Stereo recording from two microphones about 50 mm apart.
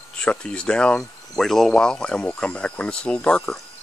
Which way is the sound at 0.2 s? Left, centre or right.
Left.